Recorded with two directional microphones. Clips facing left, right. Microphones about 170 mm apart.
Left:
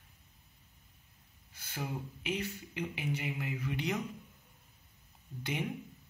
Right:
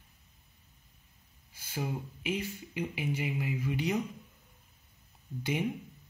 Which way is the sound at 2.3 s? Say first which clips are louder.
Right 1 dB; 10° right (ahead or behind).